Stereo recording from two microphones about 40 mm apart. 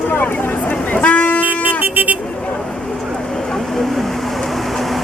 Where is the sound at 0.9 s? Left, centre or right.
Left.